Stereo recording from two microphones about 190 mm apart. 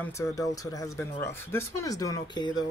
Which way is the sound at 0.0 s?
15° left (ahead or behind).